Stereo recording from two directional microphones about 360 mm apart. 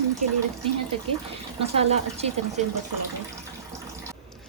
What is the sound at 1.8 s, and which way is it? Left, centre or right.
Speech, centre.